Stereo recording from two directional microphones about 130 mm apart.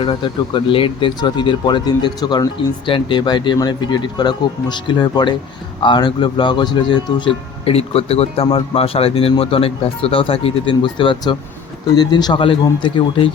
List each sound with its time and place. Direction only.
0.0 s speech: 40° left (ahead or behind)